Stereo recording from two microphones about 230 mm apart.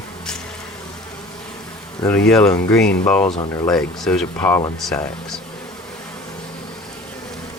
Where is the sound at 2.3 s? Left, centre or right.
Centre.